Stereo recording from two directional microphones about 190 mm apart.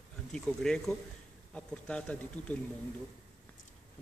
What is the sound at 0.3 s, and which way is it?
Speech, 5° left (ahead or behind).